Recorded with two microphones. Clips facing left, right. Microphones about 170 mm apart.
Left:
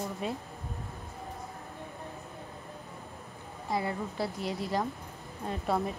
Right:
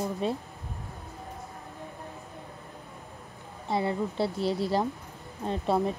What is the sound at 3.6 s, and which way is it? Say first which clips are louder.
Speech: right 4 dB; 25° right (ahead or behind).